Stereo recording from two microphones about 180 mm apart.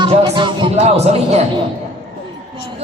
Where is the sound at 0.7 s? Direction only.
35° right (ahead or behind).